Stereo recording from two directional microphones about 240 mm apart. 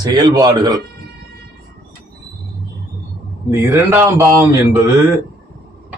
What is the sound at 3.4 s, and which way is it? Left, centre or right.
A man's voice, centre.